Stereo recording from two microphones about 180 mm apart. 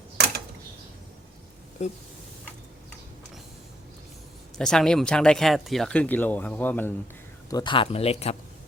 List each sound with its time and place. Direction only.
1.8 s speech: 40° left (ahead or behind)
4.5 s speech: 5° left (ahead or behind)
7.5 s speech: 25° left (ahead or behind)